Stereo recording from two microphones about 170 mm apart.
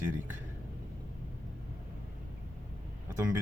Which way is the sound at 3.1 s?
15° right (ahead or behind).